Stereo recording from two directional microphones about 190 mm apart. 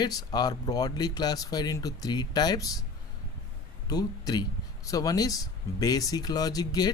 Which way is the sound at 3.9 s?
20° left (ahead or behind).